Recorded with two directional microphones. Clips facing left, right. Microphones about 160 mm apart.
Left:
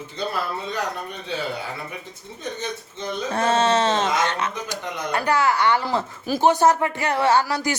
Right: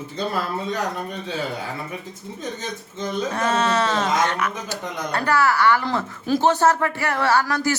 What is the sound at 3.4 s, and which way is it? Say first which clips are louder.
Speech: left 3 dB; 30° left (ahead or behind).